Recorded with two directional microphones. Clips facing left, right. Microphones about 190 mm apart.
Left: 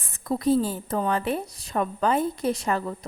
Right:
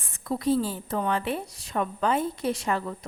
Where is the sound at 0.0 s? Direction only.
40° left (ahead or behind).